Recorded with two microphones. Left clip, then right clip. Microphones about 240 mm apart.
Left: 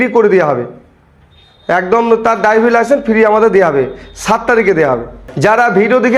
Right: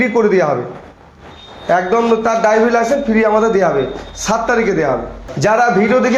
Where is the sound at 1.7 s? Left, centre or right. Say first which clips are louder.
Left 3 dB; left.